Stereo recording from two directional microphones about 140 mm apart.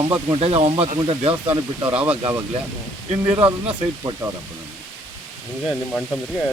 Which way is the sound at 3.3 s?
40° right (ahead or behind).